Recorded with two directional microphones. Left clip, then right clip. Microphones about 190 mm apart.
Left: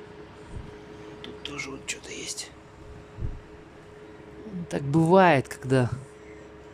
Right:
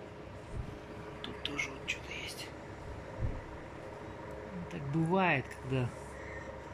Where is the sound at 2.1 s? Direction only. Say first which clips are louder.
Left 5 dB; 35° left (ahead or behind).